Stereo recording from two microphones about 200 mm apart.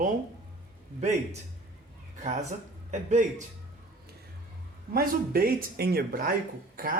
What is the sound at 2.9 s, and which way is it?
Speech, 35° right (ahead or behind).